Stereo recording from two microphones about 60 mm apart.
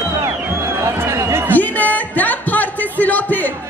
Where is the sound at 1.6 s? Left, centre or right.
Left.